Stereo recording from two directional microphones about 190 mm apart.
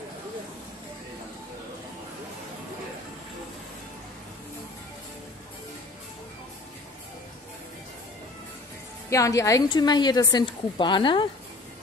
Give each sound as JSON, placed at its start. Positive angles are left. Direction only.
{"t": 9.1, "sound": "a woman's voice", "side_deg": 15}